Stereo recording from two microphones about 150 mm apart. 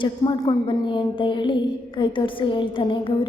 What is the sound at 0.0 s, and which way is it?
A woman's voice, 30° left (ahead or behind).